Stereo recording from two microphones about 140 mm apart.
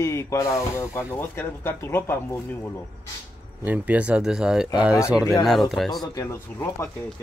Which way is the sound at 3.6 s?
10° right (ahead or behind).